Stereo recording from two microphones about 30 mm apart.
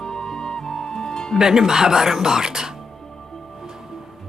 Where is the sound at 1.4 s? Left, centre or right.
Centre.